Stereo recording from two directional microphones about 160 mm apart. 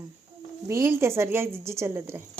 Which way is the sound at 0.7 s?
15° right (ahead or behind).